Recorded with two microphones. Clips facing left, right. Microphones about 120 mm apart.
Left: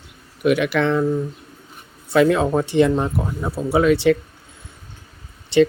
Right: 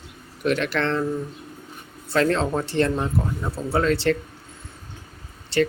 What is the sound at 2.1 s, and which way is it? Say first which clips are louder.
Speech: left 5 dB; 10° left (ahead or behind).